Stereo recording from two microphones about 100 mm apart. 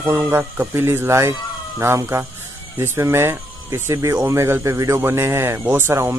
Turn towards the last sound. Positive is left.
turn(degrees=-25)  # may be behind; listen again after turning